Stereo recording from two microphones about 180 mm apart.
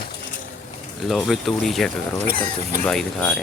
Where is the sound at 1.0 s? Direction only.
Centre (ahead or behind).